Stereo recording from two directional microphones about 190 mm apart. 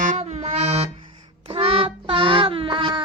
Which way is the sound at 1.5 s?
30° right (ahead or behind).